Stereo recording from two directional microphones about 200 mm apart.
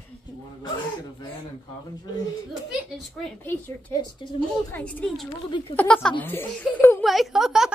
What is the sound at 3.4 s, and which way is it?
A woman's voice, 10° left (ahead or behind).